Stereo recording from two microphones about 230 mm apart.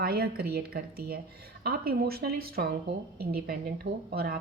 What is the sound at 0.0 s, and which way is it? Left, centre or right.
A woman's voice, right.